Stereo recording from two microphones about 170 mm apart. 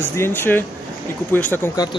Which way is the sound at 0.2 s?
10° left (ahead or behind).